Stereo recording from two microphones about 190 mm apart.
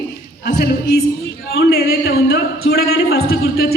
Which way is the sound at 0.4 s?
60° left (ahead or behind).